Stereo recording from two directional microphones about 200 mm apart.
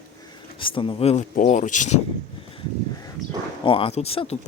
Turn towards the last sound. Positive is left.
turn(degrees=30)  # may be behind; listen again after turning